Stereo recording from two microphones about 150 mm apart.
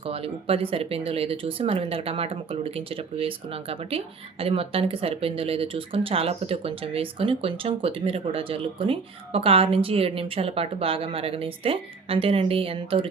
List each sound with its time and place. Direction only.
0.0 s speech: 40° right (ahead or behind)